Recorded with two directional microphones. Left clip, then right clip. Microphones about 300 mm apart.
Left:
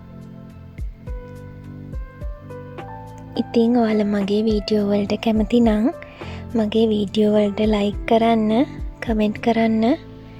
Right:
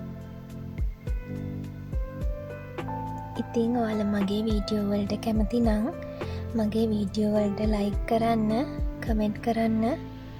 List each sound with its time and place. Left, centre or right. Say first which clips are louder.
3.3 s speech: left 10 dB; left